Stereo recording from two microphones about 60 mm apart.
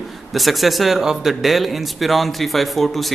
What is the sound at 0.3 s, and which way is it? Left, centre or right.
A man's voice, centre.